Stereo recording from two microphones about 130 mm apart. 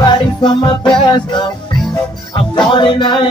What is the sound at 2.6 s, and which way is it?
Music, 35° left (ahead or behind).